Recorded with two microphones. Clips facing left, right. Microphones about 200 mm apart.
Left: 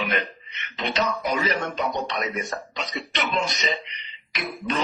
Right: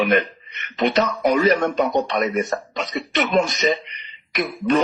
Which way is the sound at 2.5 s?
50° right (ahead or behind).